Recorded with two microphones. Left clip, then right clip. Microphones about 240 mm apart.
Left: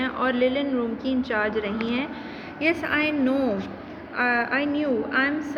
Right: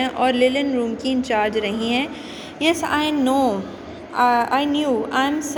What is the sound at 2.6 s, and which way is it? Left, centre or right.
Speech, right.